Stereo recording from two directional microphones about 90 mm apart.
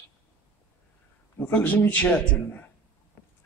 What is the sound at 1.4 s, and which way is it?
Speech, 20° left (ahead or behind).